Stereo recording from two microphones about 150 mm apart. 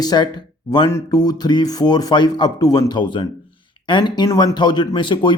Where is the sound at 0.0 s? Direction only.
30° left (ahead or behind).